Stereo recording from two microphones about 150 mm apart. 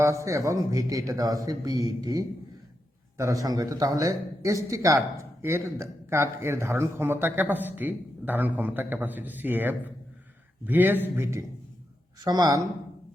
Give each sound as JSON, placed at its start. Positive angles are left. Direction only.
{"t": 0.0, "sound": "a man's voice", "side_deg": -20}